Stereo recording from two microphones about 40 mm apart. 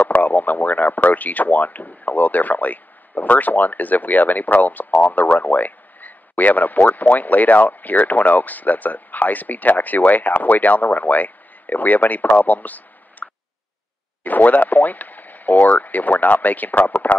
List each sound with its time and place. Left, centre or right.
0.1 s speech: left